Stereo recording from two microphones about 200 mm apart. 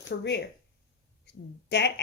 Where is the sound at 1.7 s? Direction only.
60° left (ahead or behind).